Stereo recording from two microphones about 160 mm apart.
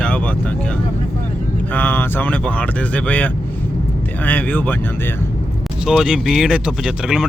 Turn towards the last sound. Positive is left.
turn(degrees=-5)  # may be behind; listen again after turning